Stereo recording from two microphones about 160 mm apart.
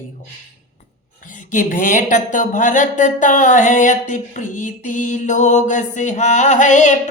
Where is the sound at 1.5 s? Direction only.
55° left (ahead or behind).